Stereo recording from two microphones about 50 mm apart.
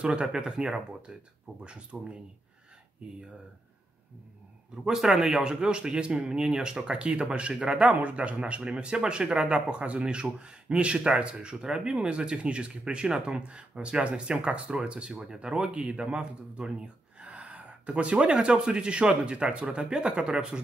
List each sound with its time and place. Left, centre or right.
0.0 s speech: right
4.8 s speech: centre